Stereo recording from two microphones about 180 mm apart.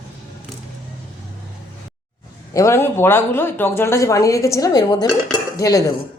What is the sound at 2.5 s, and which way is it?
Speech, 15° left (ahead or behind).